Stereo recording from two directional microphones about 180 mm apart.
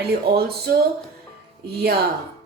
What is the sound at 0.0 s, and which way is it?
Speech, 60° right (ahead or behind).